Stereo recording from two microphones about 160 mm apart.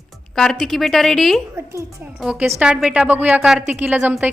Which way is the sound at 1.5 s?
15° right (ahead or behind).